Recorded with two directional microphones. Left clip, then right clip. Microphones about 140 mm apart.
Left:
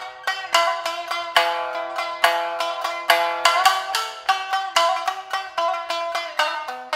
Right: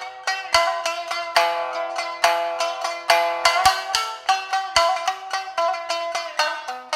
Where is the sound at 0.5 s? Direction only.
20° right (ahead or behind).